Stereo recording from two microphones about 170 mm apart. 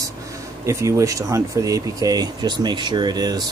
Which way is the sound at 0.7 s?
15° right (ahead or behind).